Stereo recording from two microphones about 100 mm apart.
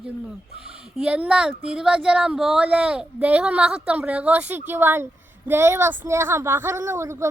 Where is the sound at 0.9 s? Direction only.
10° right (ahead or behind).